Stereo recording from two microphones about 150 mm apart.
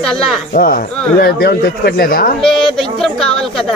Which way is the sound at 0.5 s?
80° left.